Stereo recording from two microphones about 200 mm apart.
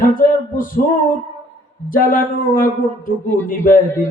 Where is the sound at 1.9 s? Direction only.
45° left (ahead or behind).